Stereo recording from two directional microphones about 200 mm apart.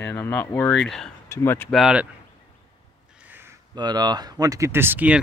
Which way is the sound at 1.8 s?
5° right (ahead or behind).